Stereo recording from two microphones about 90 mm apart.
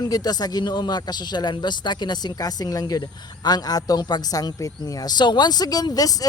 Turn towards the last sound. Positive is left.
turn(degrees=45)  # may be behind; listen again after turning